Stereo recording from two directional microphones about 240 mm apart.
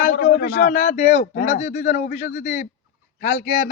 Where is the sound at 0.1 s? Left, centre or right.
Left.